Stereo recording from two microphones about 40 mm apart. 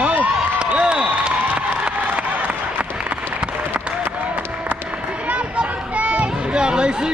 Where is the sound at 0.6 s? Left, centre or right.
Right.